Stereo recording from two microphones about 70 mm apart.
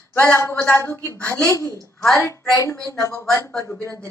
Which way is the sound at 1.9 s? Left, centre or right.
Left.